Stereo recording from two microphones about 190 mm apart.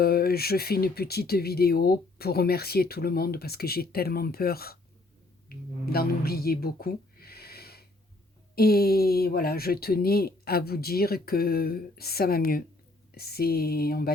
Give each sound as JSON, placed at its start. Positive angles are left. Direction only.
{"t": 0.0, "sound": "speech", "side_deg": 55}